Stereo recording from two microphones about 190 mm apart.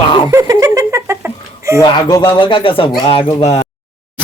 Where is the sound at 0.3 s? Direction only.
15° right (ahead or behind).